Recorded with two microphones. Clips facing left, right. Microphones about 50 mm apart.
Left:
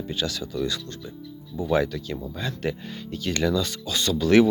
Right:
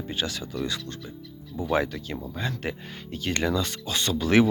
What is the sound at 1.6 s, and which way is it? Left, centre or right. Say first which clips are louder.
Speech: left 2 dB; right.